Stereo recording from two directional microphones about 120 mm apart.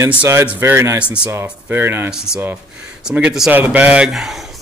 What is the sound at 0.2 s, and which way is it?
Speech, 20° right (ahead or behind).